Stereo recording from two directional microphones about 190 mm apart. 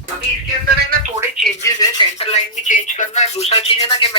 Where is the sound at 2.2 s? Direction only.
35° left (ahead or behind).